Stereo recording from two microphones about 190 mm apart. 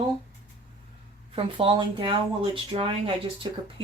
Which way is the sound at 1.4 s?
30° right (ahead or behind).